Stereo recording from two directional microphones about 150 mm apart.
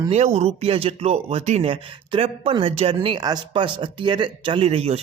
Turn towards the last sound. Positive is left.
turn(degrees=-40)  # may be behind; listen again after turning